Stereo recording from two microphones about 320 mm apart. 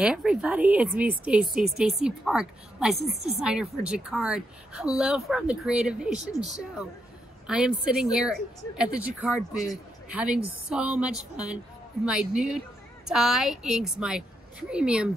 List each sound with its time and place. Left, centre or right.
0.0 s speech: centre
7.4 s speech: centre